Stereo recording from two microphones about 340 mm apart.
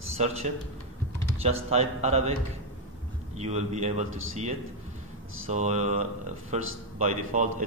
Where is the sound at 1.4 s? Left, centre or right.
Centre.